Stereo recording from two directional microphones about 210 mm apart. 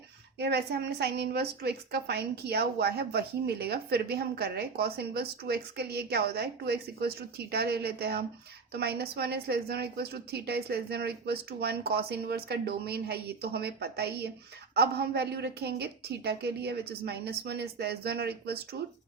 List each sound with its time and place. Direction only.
0.3 s a woman's voice: 50° right (ahead or behind)